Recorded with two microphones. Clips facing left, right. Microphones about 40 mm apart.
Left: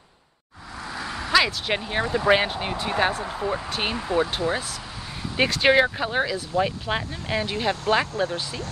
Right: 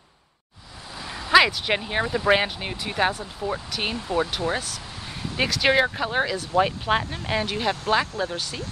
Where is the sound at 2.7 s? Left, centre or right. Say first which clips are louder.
Left 5 dB; left.